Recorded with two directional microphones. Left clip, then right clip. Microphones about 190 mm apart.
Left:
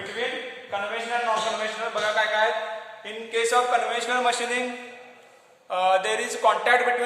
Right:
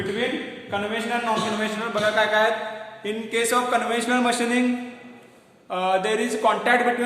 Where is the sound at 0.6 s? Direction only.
45° right (ahead or behind).